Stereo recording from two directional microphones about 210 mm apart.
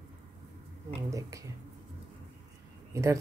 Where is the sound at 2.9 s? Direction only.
15° right (ahead or behind).